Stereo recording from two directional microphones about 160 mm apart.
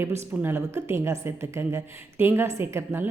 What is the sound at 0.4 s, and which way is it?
A woman's voice, 15° right (ahead or behind).